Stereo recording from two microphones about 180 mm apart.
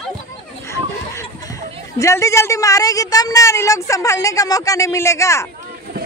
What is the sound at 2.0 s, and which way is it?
A woman's voice, 15° left (ahead or behind).